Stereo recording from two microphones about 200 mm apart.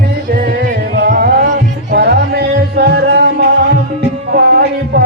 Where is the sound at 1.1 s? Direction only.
50° right (ahead or behind).